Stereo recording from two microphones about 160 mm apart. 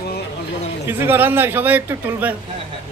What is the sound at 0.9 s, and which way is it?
A man's voice, 15° right (ahead or behind).